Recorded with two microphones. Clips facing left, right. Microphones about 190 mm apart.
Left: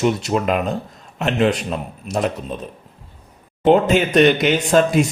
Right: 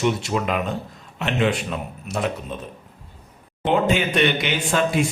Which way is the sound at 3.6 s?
40° left (ahead or behind).